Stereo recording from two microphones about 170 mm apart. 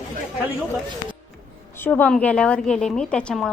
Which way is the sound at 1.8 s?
10° left (ahead or behind).